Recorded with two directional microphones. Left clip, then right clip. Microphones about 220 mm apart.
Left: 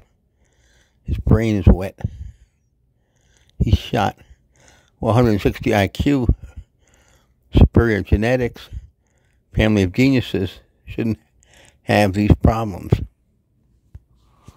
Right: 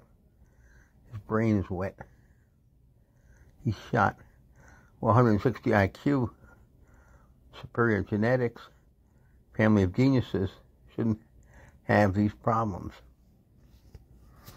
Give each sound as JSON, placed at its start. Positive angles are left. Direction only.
{"t": 1.4, "sound": "speech", "side_deg": 50}
{"t": 3.3, "sound": "speech", "side_deg": 50}